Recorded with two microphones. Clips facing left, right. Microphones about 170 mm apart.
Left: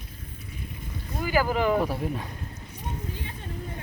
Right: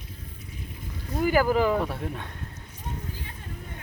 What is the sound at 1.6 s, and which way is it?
Speech, centre (ahead or behind).